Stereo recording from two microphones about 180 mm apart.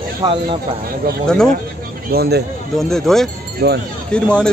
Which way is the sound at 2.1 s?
60° right (ahead or behind).